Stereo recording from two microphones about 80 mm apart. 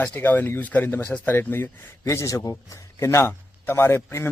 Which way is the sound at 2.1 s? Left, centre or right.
Left.